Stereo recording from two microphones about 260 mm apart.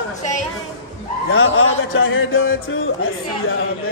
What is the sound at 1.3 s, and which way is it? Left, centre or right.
Speech, left.